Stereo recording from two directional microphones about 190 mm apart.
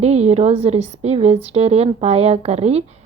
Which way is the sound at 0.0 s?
35° right (ahead or behind).